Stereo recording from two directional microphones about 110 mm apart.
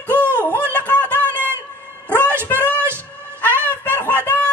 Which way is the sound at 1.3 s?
20° right (ahead or behind).